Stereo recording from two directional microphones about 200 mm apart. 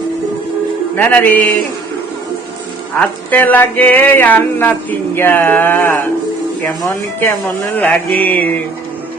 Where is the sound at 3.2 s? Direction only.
10° left (ahead or behind).